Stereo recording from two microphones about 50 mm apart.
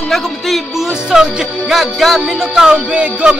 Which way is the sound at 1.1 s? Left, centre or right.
Centre.